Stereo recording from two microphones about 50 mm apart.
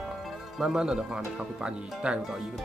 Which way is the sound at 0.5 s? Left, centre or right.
Centre.